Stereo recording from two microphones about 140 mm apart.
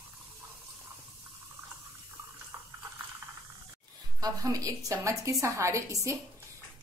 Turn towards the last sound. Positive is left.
turn(degrees=-20)  # may be behind; listen again after turning